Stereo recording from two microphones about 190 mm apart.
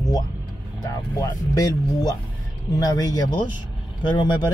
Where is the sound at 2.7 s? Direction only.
20° left (ahead or behind).